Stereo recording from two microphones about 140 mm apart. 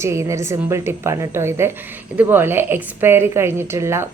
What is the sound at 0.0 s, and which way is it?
A woman's voice, 20° right (ahead or behind).